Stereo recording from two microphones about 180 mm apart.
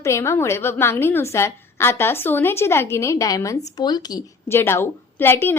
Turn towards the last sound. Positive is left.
turn(degrees=10)  # may be behind; listen again after turning